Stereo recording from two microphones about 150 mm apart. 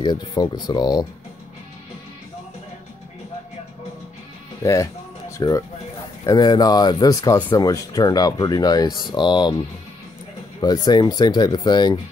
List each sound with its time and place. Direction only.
0.0 s speech: 30° left (ahead or behind)
4.6 s speech: 20° left (ahead or behind)
10.6 s speech: 25° left (ahead or behind)